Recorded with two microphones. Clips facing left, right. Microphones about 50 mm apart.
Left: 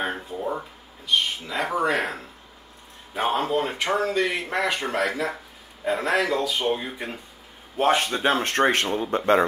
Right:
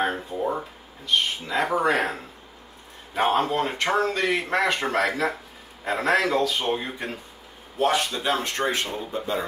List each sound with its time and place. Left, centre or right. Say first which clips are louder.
0.4 s speech: right 2 dB; centre
3.2 s a man's voice: right 1 dB; centre
7.7 s speech: left 2 dB; left